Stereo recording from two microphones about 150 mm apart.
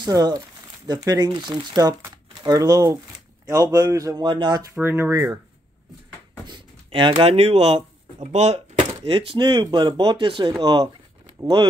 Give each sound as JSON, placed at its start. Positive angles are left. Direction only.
{"t": 0.0, "sound": "speech", "side_deg": -25}
{"t": 4.7, "sound": "speech", "side_deg": -15}
{"t": 6.4, "sound": "speech", "side_deg": -30}